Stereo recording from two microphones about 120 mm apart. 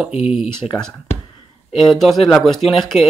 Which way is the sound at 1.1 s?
60° left (ahead or behind).